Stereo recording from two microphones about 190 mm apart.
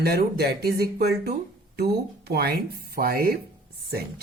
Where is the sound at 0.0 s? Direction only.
55° right (ahead or behind).